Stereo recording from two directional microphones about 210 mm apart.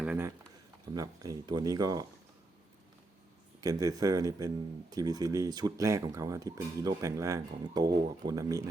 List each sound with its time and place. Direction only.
0.0 s a sound: 10° right (ahead or behind)
0.9 s speech: 15° right (ahead or behind)
3.6 s speech: 15° right (ahead or behind)